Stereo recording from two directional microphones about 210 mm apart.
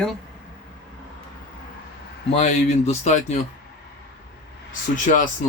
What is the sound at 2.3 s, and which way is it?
Speech, 30° left (ahead or behind).